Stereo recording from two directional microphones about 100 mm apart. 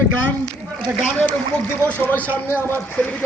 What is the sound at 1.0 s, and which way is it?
A man's voice, 10° left (ahead or behind).